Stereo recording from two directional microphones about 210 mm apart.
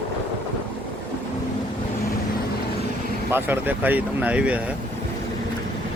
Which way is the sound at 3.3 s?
10° right (ahead or behind).